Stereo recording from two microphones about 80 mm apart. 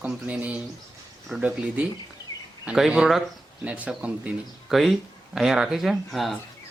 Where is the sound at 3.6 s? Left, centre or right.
Centre.